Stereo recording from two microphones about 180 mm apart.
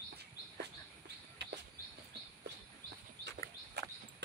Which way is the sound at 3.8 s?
65° right (ahead or behind).